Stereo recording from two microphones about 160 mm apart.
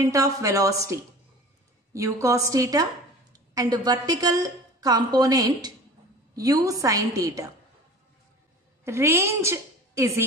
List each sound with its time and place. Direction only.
0.0 s a woman's voice: 20° right (ahead or behind)
8.8 s a woman's voice: 15° right (ahead or behind)